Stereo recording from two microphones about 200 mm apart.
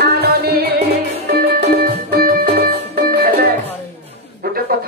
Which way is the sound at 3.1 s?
50° right (ahead or behind).